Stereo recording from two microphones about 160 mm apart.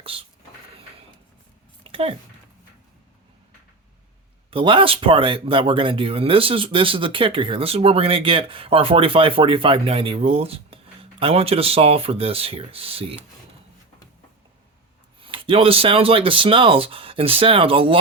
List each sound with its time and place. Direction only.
0.0 s speech: 35° right (ahead or behind)
1.8 s a sound: 35° right (ahead or behind)
4.5 s speech: 30° right (ahead or behind)
15.2 s speech: 35° right (ahead or behind)